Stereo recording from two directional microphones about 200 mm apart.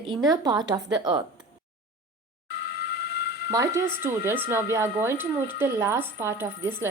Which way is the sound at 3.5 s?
15° right (ahead or behind).